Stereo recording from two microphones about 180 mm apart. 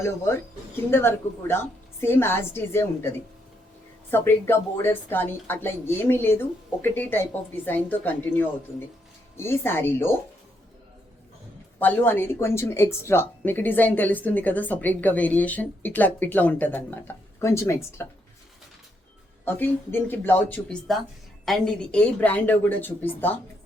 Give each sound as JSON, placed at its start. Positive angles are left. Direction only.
{"t": 0.9, "sound": "speech", "side_deg": 15}
{"t": 4.1, "sound": "speech", "side_deg": 10}
{"t": 11.8, "sound": "speech", "side_deg": 10}
{"t": 19.5, "sound": "speech", "side_deg": 10}